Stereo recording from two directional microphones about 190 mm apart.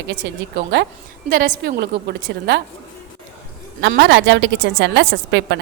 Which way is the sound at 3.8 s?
70° right (ahead or behind).